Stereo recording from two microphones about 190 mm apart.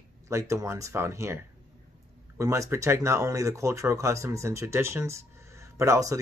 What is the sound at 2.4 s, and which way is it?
Speech, 15° right (ahead or behind).